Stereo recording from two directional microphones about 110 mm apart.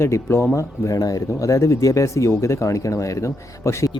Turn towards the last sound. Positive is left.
turn(degrees=25)  # may be behind; listen again after turning